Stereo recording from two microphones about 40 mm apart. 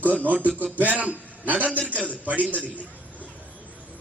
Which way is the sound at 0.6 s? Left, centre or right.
Right.